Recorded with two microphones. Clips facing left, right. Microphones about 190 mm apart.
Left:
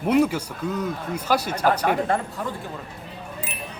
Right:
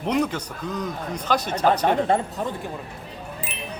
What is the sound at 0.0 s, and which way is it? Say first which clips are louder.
Speech: left 4 dB; 10° left (ahead or behind).